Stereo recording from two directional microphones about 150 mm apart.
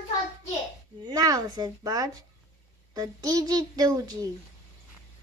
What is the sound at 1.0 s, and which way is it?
A child's voice, 25° right (ahead or behind).